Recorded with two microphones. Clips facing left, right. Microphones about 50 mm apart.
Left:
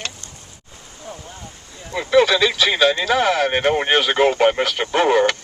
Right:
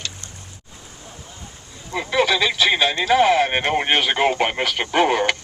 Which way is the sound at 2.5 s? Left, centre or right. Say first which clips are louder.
Left 2 dB; right.